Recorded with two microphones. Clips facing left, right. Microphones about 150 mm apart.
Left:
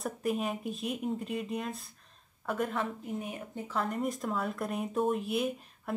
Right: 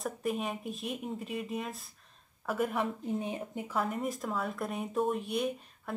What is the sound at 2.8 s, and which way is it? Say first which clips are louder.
Speech: right 2 dB; 25° right (ahead or behind).